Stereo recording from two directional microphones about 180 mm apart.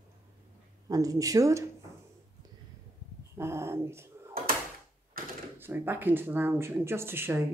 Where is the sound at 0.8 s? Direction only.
20° right (ahead or behind).